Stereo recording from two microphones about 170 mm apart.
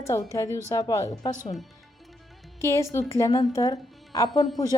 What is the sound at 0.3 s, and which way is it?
Speech, 15° left (ahead or behind).